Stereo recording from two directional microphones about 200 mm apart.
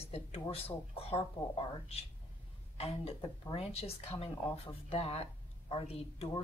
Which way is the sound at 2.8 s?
30° left (ahead or behind).